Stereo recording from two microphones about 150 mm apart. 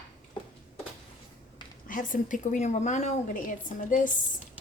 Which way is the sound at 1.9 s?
60° left (ahead or behind).